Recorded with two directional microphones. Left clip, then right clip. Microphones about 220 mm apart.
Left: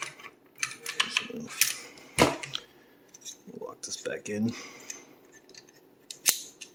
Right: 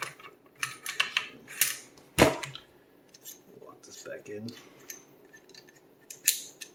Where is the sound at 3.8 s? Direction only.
55° left (ahead or behind).